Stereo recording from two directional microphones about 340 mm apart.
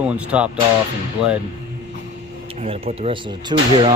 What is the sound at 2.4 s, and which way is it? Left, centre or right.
Speech, centre.